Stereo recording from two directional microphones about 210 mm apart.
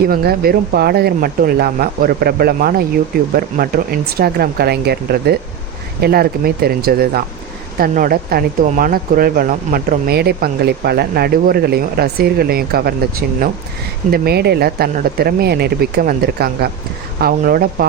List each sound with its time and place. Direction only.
0.0 s speech: 45° right (ahead or behind)